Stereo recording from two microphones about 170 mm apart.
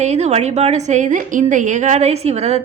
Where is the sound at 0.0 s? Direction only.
40° right (ahead or behind).